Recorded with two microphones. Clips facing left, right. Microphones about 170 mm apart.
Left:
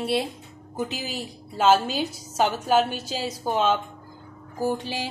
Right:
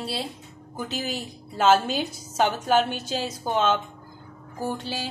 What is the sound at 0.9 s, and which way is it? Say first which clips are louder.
A woman's voice: right 2 dB; 5° left (ahead or behind).